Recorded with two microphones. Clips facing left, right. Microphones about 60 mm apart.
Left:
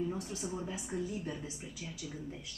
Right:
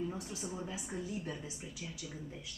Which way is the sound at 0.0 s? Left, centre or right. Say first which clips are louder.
Left 3 dB; centre.